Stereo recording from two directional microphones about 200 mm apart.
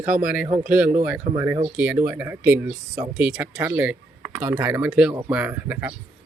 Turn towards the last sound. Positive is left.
turn(degrees=-10)  # may be behind; listen again after turning